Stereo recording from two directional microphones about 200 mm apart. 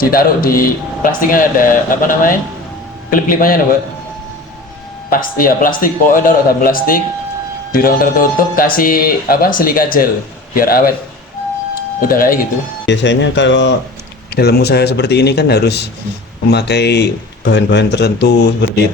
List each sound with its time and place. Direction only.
0.0 s speech: 45° left (ahead or behind)
5.0 s speech: 45° left (ahead or behind)
12.0 s speech: 45° left (ahead or behind)
12.8 s speech: 65° left (ahead or behind)
14.3 s speech: 55° left (ahead or behind)